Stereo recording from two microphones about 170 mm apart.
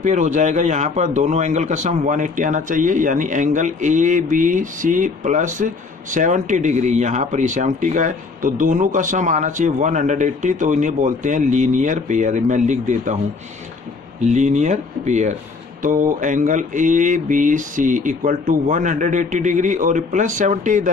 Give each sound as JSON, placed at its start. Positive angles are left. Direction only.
{"t": 0.0, "sound": "a man's voice", "side_deg": -45}
{"t": 14.2, "sound": "a man's voice", "side_deg": -45}